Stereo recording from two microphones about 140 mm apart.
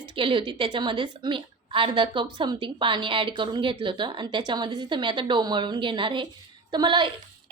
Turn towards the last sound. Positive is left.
turn(degrees=-35)  # may be behind; listen again after turning